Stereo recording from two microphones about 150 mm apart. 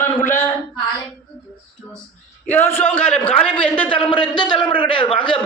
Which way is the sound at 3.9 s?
35° left (ahead or behind).